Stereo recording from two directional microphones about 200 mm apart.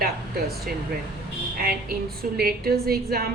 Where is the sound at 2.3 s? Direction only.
50° right (ahead or behind).